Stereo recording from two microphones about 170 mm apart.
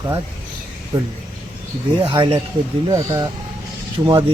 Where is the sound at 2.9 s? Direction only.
15° right (ahead or behind).